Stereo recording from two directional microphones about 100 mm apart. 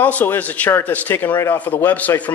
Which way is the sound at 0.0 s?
20° left (ahead or behind).